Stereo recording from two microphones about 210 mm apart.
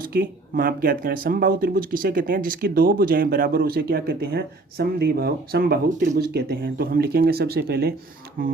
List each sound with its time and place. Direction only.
0.0 s speech: 45° right (ahead or behind)